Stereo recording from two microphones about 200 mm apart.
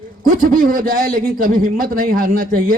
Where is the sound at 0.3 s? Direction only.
45° right (ahead or behind).